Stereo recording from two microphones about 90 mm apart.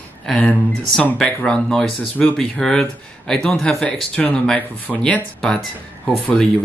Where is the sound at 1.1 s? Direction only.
10° left (ahead or behind).